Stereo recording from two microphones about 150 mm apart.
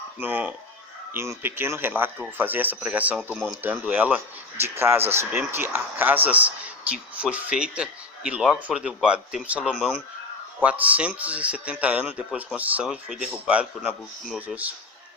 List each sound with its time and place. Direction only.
0.2 s speech: 10° right (ahead or behind); by 10.0 s 5° left (ahead or behind)
10.6 s speech: 10° right (ahead or behind)